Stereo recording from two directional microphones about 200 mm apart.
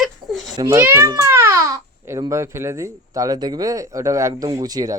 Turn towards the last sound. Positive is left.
turn(degrees=-20)  # may be behind; listen again after turning